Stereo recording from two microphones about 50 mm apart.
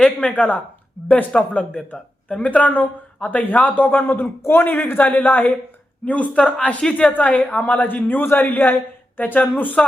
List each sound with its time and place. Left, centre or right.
0.0 s speech: centre
0.3 s speech: left
1.0 s speech: centre
1.3 s speech: centre; by 5.5 s left
6.3 s speech: left
9.8 s speech: centre